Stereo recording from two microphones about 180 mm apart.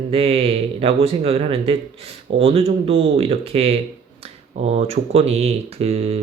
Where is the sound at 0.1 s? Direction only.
35° right (ahead or behind).